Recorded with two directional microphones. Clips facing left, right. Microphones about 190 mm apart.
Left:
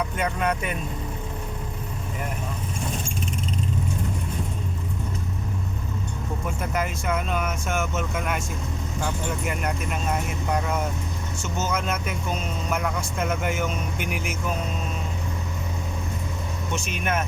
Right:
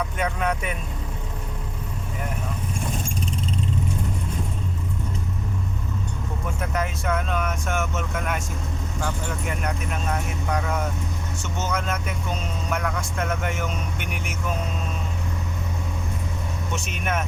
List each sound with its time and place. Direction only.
0.2 s speech: centre (ahead or behind)
6.6 s speech: centre (ahead or behind)
11.4 s speech: 5° left (ahead or behind)
16.7 s speech: centre (ahead or behind)